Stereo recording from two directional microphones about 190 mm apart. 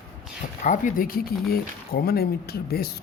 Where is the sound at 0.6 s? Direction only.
45° left (ahead or behind).